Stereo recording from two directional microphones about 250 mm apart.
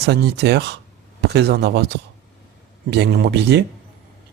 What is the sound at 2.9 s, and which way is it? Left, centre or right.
Speech, right.